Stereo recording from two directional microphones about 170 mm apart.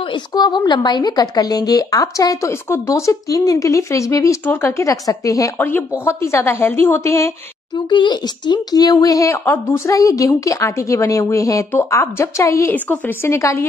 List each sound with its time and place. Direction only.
0.1 s a woman's voice: 25° left (ahead or behind)